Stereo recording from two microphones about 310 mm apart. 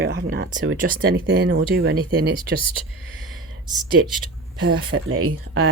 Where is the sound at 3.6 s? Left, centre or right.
Centre.